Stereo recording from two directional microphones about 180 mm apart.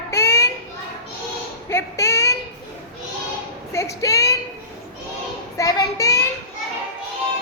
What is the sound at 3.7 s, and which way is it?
Female singing, 15° left (ahead or behind).